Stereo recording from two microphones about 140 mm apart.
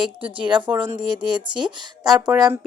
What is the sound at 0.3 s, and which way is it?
Speech, 35° right (ahead or behind).